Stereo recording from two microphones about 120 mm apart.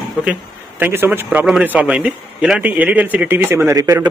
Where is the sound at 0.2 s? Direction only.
15° right (ahead or behind).